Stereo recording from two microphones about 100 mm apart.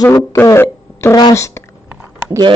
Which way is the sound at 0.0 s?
35° left (ahead or behind).